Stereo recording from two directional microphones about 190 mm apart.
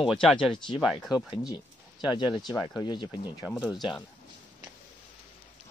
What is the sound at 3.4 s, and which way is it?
Speech, 5° right (ahead or behind).